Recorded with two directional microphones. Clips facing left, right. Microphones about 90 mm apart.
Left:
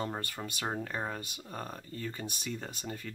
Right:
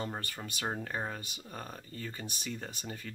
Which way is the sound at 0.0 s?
Centre (ahead or behind).